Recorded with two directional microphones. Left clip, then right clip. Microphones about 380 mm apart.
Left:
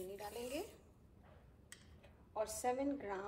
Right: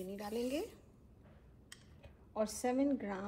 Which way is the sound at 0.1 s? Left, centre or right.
Centre.